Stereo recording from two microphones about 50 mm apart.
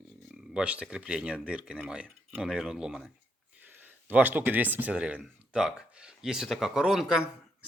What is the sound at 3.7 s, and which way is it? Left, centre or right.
Speech, right.